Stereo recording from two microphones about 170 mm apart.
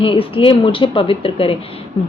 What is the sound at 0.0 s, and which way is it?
A woman's voice, 30° left (ahead or behind).